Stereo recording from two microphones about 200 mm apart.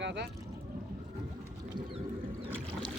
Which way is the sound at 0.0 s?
60° right (ahead or behind).